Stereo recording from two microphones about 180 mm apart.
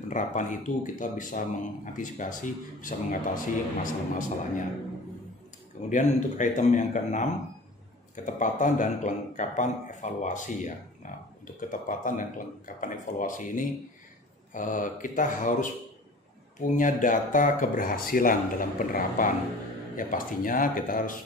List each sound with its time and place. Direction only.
0.1 s speech: 45° left (ahead or behind)
5.9 s speech: 45° left (ahead or behind)
8.3 s speech: 45° left (ahead or behind)
16.5 s speech: 45° left (ahead or behind)